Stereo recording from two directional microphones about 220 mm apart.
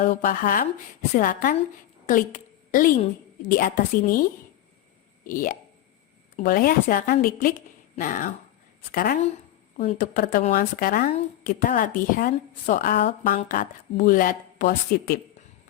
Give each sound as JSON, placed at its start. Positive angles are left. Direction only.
{"t": 0.0, "sound": "a woman's voice", "side_deg": 35}